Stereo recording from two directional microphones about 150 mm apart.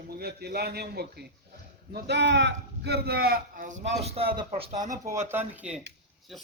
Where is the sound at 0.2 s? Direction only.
90° right.